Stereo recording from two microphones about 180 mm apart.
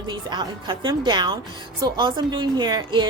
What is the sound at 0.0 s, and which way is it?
A woman's voice, 25° right (ahead or behind).